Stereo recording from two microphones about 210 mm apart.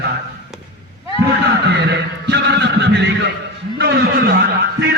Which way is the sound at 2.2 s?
55° right (ahead or behind).